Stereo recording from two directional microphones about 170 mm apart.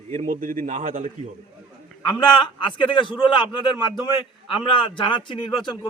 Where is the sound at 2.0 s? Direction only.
30° left (ahead or behind).